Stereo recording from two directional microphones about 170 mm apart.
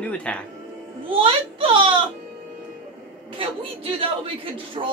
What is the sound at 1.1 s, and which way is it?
Speech, 30° right (ahead or behind).